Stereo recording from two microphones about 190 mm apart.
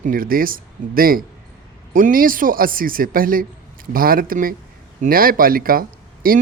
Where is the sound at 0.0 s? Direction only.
50° right (ahead or behind).